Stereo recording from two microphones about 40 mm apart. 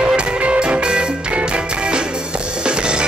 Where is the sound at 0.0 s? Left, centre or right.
Right.